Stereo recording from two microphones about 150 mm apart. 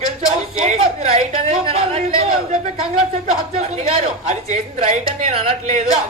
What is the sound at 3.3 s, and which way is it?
A woman's voice, 45° right (ahead or behind).